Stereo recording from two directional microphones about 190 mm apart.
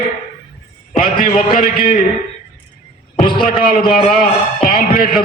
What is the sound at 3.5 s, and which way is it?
Speech, 45° left (ahead or behind).